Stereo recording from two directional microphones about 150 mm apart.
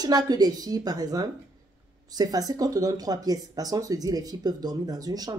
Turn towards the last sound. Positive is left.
turn(degrees=-25)  # may be behind; listen again after turning